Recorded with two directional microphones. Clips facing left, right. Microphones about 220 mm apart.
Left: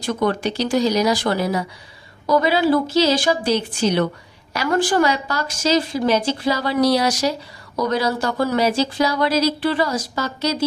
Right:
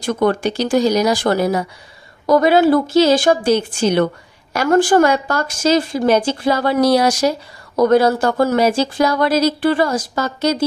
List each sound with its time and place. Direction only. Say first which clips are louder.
0.0 s speech: right 4 dB; 50° right (ahead or behind)